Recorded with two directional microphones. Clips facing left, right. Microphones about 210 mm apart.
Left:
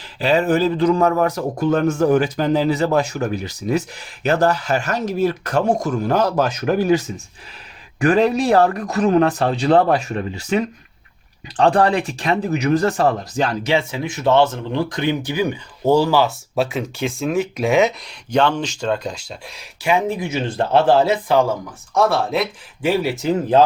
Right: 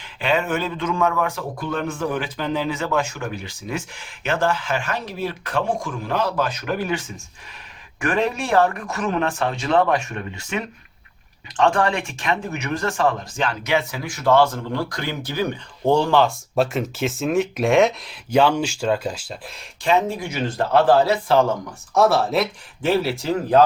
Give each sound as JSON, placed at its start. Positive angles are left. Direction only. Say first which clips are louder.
{"t": 0.2, "sound": "speech", "louder": "left 6 dB", "side_deg": 35}
{"t": 19.8, "sound": "speech", "louder": "left 1 dB", "side_deg": 10}
{"t": 21.9, "sound": "speech", "louder": "even", "side_deg": 0}
{"t": 22.8, "sound": "speech", "louder": "left 1 dB", "side_deg": 15}